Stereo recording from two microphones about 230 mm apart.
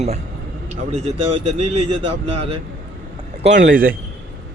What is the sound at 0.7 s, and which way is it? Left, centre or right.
Speech, right.